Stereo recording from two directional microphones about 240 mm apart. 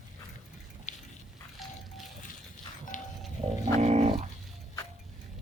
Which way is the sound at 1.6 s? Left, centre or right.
Centre.